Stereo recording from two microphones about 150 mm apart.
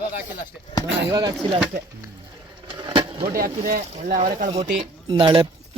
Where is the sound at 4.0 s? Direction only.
55° right (ahead or behind).